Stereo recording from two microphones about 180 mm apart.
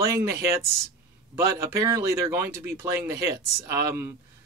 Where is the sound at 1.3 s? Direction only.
15° right (ahead or behind).